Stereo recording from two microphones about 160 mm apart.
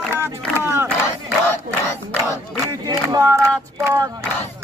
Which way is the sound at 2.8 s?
20° right (ahead or behind).